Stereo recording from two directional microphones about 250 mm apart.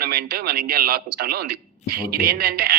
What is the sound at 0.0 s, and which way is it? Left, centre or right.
A man's voice, right.